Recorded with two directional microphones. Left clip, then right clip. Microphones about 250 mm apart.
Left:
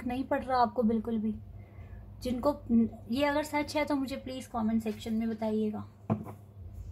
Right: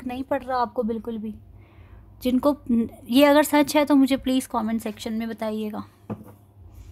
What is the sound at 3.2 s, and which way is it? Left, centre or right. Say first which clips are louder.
A woman's voice: right 12 dB; right.